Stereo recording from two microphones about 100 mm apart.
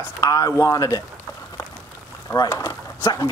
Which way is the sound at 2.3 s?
30° left (ahead or behind).